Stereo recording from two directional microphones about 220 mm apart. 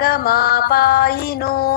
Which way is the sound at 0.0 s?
45° left (ahead or behind).